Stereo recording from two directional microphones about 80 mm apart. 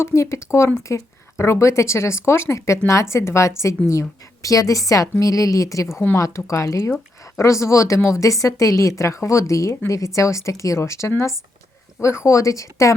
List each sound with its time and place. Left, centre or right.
0.0 s a woman's voice: left